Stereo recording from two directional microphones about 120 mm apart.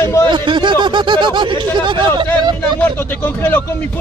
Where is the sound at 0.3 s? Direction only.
40° right (ahead or behind).